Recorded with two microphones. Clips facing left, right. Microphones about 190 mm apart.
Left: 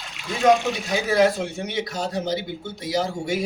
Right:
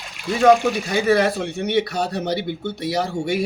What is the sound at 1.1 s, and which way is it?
Speech, 65° right (ahead or behind).